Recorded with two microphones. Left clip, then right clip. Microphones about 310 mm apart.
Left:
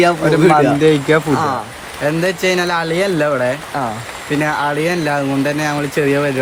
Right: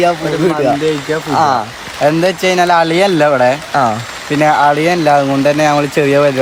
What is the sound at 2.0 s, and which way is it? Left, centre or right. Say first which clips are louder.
Speech: right 5 dB; centre.